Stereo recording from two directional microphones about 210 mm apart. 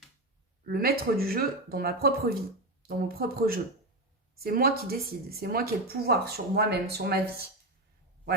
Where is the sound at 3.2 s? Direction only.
45° right (ahead or behind).